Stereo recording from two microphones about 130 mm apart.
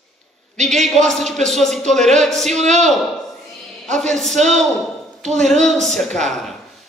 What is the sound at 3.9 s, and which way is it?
Speech, 65° right (ahead or behind).